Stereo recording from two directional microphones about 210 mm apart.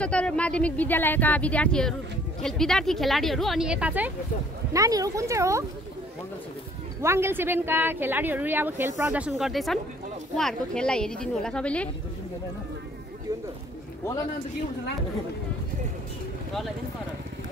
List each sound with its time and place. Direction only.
0.0 s speech: 5° left (ahead or behind); by 5.7 s 15° right (ahead or behind)
7.0 s speech: 10° right (ahead or behind); by 11.9 s 5° left (ahead or behind)
14.0 s a man's voice: 15° left (ahead or behind)